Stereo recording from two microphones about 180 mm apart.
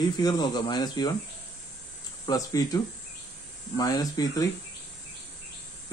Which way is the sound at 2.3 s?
20° left (ahead or behind).